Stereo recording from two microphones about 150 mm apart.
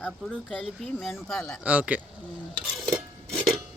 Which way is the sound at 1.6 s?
10° right (ahead or behind).